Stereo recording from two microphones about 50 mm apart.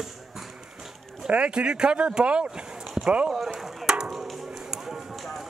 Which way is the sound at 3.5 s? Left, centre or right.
Centre.